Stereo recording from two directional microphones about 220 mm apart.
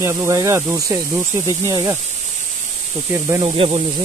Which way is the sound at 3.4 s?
25° right (ahead or behind).